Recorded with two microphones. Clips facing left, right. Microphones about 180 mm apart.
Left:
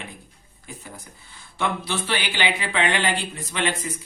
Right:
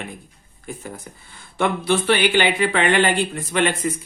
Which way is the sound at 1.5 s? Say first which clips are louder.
Right 7 dB; 55° right (ahead or behind).